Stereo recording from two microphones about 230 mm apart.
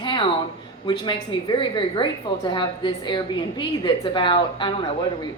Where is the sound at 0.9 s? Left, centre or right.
Centre.